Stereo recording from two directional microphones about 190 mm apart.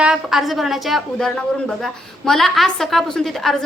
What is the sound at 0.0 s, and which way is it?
A woman's voice, centre (ahead or behind).